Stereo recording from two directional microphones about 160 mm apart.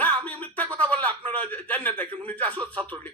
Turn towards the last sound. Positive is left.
turn(degrees=10)  # may be behind; listen again after turning